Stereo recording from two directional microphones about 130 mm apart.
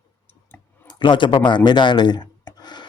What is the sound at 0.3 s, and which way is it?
Tick-tock, 15° left (ahead or behind).